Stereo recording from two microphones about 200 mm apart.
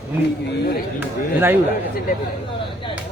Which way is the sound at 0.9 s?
10° right (ahead or behind).